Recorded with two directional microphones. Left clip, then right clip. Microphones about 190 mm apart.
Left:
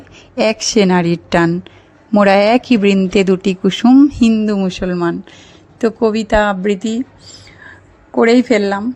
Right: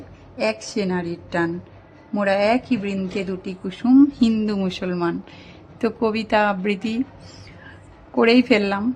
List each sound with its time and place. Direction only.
0.3 s speech: 40° left (ahead or behind)
3.9 s a woman's voice: 30° left (ahead or behind)
8.1 s a woman's voice: 25° left (ahead or behind)